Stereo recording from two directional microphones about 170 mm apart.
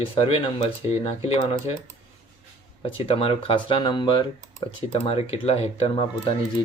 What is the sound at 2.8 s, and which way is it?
Speech, 35° left (ahead or behind).